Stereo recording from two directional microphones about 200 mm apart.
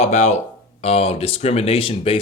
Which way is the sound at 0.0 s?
35° left (ahead or behind).